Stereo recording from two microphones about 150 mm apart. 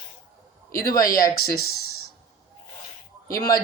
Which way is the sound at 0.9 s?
25° left (ahead or behind).